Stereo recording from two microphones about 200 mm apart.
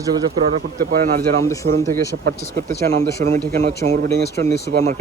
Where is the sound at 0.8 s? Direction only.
50° right (ahead or behind).